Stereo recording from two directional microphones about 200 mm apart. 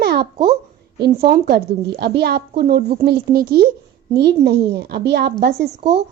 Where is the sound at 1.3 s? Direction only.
50° right (ahead or behind).